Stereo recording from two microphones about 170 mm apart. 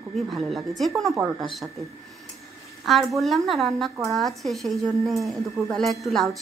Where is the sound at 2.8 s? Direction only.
Centre (ahead or behind).